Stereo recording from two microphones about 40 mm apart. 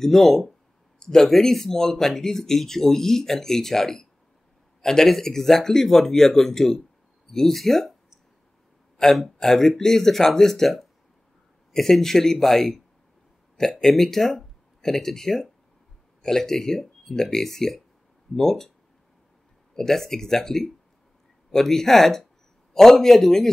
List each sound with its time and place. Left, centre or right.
0.0 s speech: centre
8.9 s speech: centre
19.7 s speech: centre